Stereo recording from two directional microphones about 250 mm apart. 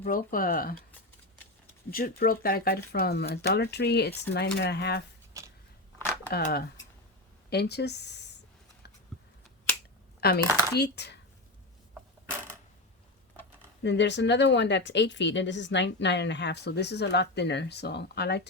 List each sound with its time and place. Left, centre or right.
0.0 s speech: left
1.9 s speech: left
5.4 s biting: centre
6.3 s speech: left
10.2 s speech: left
13.8 s a woman's voice: left